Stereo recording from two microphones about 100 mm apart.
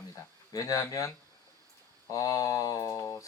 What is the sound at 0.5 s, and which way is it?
Speech, 35° left (ahead or behind).